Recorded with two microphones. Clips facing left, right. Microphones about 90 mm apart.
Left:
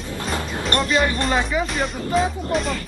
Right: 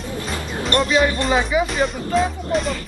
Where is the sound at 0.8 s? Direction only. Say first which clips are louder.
Right 2 dB; centre (ahead or behind).